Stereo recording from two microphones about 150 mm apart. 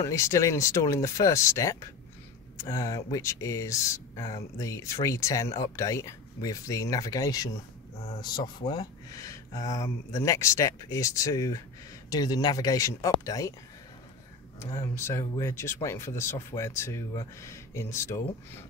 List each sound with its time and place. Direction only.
0.0 s speech: 20° left (ahead or behind)
14.6 s speech: 20° left (ahead or behind)